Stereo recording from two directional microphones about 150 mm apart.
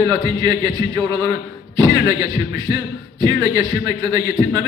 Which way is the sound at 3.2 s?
25° right (ahead or behind).